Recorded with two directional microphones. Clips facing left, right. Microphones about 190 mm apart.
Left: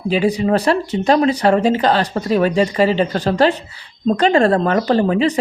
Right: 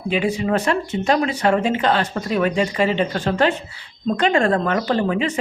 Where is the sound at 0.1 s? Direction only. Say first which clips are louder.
Left 4 dB; 35° left (ahead or behind).